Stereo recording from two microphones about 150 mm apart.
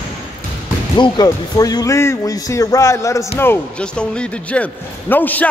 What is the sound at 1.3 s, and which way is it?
A man's voice, 25° left (ahead or behind).